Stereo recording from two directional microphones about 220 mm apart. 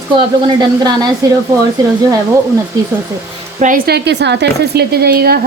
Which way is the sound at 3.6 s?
40° right (ahead or behind).